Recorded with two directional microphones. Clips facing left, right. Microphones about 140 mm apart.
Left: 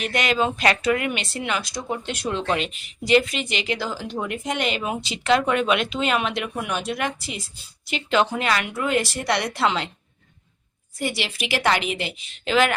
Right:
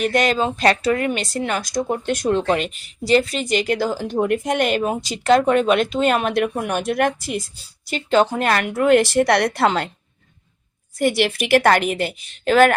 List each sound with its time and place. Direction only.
0.0 s speech: 40° right (ahead or behind)
7.9 s speech: 40° right (ahead or behind)
8.4 s speech: 50° right (ahead or behind)
10.9 s speech: 50° right (ahead or behind)